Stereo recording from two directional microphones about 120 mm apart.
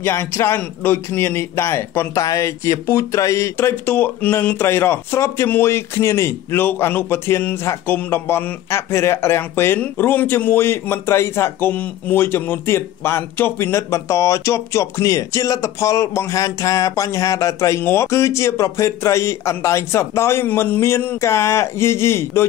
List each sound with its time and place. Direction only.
0.0 s speech: 20° left (ahead or behind)